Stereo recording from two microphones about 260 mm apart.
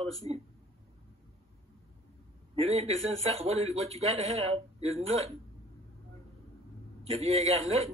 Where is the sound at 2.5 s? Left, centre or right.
Right.